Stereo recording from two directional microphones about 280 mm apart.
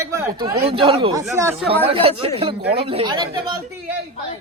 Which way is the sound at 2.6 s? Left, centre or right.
Right.